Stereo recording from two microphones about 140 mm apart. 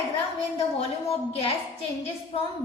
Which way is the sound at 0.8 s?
45° left (ahead or behind).